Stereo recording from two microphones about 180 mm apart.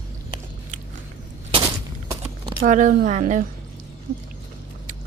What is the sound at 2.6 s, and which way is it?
Speech, 45° right (ahead or behind).